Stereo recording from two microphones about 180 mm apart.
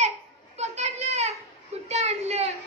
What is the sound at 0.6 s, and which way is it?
Children playing, 40° right (ahead or behind).